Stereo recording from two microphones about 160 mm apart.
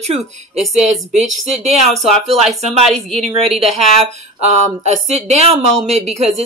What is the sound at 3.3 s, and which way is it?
Speech, 35° right (ahead or behind).